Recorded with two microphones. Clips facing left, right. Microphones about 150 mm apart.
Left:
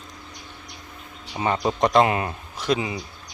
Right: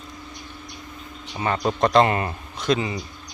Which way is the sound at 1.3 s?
15° left (ahead or behind).